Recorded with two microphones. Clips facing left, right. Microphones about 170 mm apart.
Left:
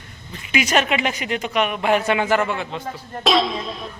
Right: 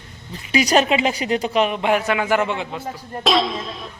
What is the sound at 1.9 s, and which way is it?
Speech, 5° right (ahead or behind).